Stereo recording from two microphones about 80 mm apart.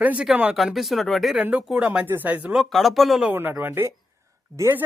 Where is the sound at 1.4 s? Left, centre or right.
Centre.